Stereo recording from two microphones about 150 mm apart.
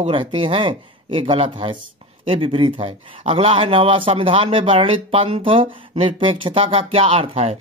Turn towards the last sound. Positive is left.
turn(degrees=-40)  # may be behind; listen again after turning